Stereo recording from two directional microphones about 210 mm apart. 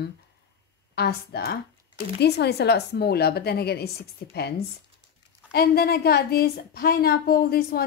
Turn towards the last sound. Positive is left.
turn(degrees=45)  # may be behind; listen again after turning